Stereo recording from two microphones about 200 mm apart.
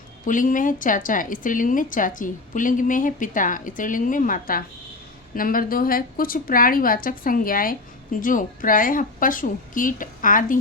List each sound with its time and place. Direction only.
0.3 s a woman's voice: 40° left (ahead or behind)